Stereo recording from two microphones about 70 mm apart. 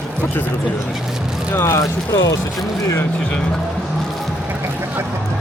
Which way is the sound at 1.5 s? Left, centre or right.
Left.